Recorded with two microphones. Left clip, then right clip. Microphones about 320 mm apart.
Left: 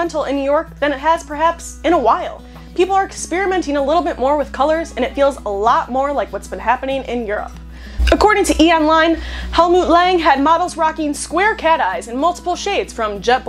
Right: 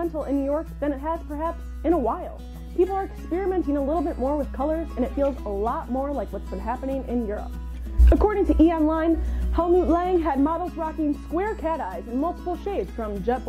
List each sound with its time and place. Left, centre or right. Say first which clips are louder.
0.0 s a woman's voice: left 8 dB; centre
9.7 s a woman's voice: left 3 dB; left
9.9 s a woman's voice: left 10 dB; centre